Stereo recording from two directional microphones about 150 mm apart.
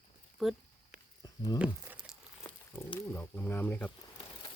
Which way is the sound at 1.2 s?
25° left (ahead or behind).